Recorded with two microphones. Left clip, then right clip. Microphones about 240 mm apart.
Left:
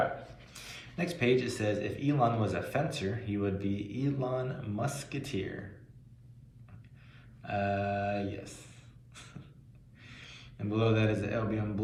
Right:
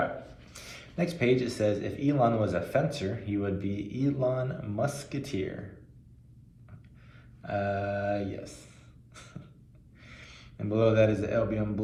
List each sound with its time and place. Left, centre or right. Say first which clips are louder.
0.5 s a sound: right 4 dB; right
1.4 s speech: right 4 dB; right
7.5 s speech: right 1 dB; right
10.0 s a man's voice: even; right